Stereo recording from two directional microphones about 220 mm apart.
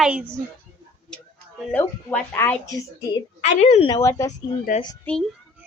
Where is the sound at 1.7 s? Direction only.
10° left (ahead or behind).